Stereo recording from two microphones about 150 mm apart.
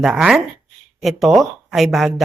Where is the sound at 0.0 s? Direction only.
5° right (ahead or behind).